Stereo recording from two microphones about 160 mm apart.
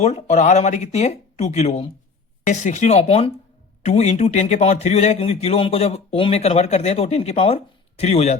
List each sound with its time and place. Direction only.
0.0 s speech: 40° left (ahead or behind)